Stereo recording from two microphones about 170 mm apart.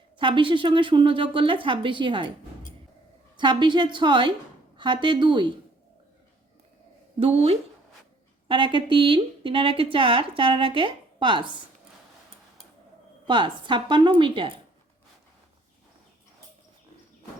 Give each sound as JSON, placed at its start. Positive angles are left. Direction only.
{"t": 0.2, "sound": "a woman's voice", "side_deg": -30}
{"t": 3.3, "sound": "a woman's voice", "side_deg": -25}
{"t": 7.2, "sound": "a woman's voice", "side_deg": -35}
{"t": 13.2, "sound": "a woman's voice", "side_deg": -30}